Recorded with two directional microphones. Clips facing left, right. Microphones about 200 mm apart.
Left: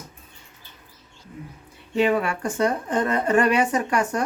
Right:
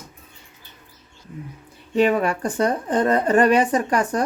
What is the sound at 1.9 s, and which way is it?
Speech, 40° right (ahead or behind).